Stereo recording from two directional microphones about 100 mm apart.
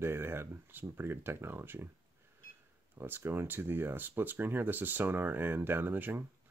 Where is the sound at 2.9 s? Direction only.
25° right (ahead or behind).